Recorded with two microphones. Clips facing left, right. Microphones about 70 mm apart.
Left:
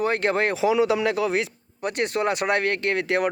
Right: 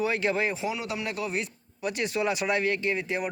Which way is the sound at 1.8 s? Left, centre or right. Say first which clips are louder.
Left 4 dB; left.